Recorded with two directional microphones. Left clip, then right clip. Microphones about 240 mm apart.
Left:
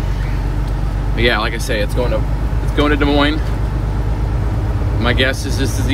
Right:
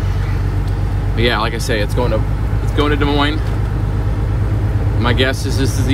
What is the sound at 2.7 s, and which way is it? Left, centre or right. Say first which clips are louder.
Speech: left 1 dB; centre.